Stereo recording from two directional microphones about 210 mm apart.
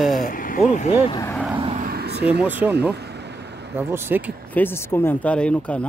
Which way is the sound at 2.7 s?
50° right (ahead or behind).